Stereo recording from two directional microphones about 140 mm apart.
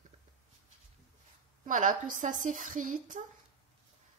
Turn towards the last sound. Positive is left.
turn(degrees=-65)  # may be behind; listen again after turning